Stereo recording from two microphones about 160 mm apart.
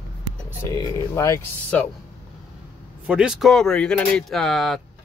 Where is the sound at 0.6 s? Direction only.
20° left (ahead or behind).